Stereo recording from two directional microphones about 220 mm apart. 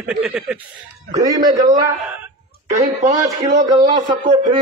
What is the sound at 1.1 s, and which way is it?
Speech, 15° right (ahead or behind).